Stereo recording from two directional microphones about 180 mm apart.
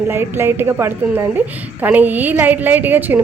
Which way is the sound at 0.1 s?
15° right (ahead or behind).